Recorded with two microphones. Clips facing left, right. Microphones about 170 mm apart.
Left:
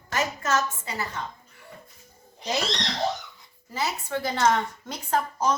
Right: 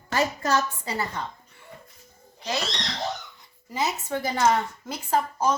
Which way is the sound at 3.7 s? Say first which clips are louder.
Right 1 dB; 15° right (ahead or behind).